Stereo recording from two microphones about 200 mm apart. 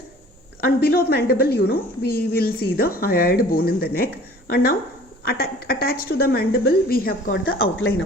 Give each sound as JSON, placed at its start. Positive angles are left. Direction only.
{"t": 0.6, "sound": "a woman's voice", "side_deg": 50}
{"t": 7.8, "sound": "speech", "side_deg": 70}